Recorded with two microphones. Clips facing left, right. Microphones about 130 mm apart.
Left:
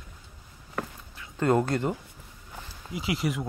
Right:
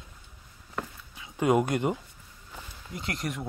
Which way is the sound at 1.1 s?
15° right (ahead or behind).